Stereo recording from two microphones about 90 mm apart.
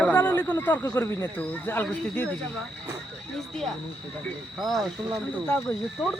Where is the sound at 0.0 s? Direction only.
25° left (ahead or behind).